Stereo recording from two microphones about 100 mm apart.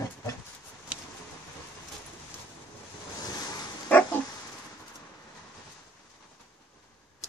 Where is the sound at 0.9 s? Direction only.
15° right (ahead or behind).